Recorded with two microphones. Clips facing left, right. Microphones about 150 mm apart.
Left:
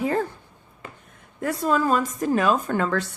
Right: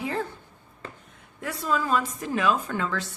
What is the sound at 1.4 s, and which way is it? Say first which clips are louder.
A woman's voice: left 6 dB; 45° left (ahead or behind).